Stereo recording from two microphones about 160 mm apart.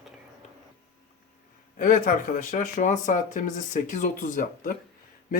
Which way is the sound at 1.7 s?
55° left (ahead or behind).